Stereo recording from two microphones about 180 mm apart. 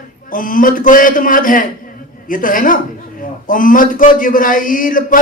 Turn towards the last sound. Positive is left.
turn(degrees=50)  # may be behind; listen again after turning